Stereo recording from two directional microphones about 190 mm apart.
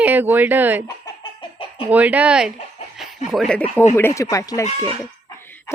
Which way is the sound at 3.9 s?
15° left (ahead or behind).